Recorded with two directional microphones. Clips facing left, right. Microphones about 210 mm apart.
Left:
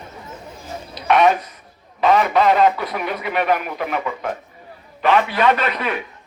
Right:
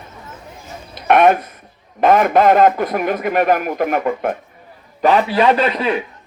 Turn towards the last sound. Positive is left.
turn(degrees=-30)  # may be behind; listen again after turning